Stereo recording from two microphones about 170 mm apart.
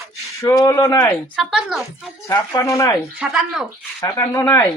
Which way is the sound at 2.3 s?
20° left (ahead or behind).